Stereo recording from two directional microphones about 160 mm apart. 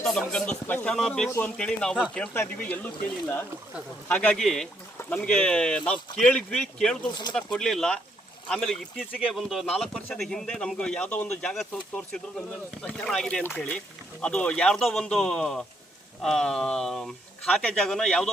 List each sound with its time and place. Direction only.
0.0 s speech: 5° left (ahead or behind)
4.1 s speech: 10° left (ahead or behind)
7.1 s speech: 25° left (ahead or behind)
7.3 s speech: 5° left (ahead or behind)